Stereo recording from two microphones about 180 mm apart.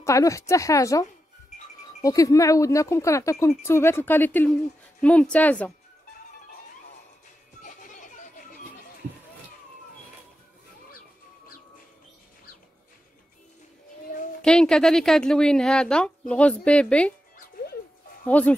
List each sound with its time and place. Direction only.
0.0 s speech: 15° left (ahead or behind)
7.6 s a sound: 45° left (ahead or behind)
14.4 s speech: 5° left (ahead or behind)
18.2 s speech: 10° left (ahead or behind)